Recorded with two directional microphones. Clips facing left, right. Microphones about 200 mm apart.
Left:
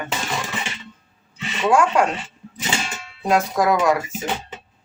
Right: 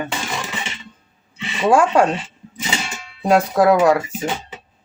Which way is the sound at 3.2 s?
30° right (ahead or behind).